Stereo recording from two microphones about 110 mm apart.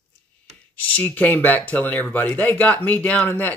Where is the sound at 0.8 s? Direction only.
15° left (ahead or behind).